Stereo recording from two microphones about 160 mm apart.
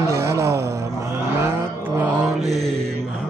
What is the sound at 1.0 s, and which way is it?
Mantra, 15° right (ahead or behind).